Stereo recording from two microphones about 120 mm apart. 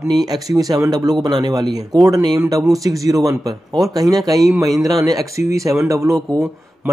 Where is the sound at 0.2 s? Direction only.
30° right (ahead or behind).